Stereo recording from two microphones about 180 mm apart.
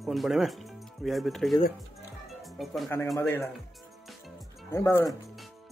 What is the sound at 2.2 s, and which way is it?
Music, centre (ahead or behind).